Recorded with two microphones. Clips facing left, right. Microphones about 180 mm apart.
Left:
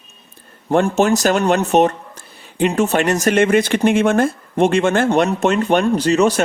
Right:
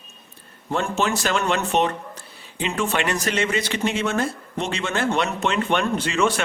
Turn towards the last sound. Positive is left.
turn(degrees=40)  # may be behind; listen again after turning